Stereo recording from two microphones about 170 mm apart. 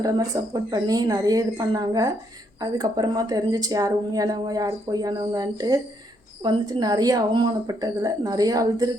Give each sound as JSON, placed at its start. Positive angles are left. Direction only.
{"t": 0.0, "sound": "speech", "side_deg": -20}